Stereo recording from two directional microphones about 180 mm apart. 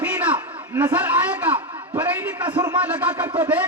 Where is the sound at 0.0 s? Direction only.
10° right (ahead or behind).